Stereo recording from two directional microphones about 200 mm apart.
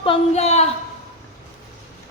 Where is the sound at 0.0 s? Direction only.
30° left (ahead or behind).